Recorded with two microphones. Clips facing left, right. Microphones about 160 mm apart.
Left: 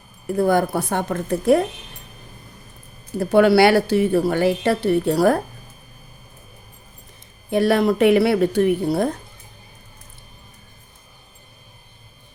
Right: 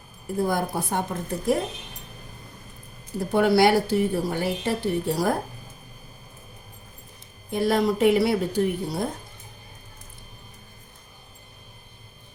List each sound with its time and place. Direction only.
0.3 s a woman's voice: 65° left (ahead or behind)
3.2 s a woman's voice: 80° left
7.5 s a woman's voice: 70° left (ahead or behind)